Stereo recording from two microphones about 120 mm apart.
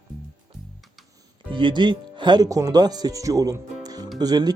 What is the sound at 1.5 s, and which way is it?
Speech, 40° right (ahead or behind).